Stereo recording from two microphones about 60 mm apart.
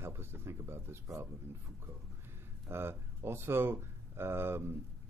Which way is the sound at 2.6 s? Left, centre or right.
Right.